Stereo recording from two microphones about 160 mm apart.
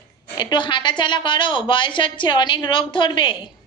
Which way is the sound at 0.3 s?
30° left (ahead or behind).